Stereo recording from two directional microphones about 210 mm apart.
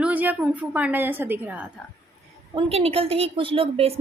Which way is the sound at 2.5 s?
25° right (ahead or behind).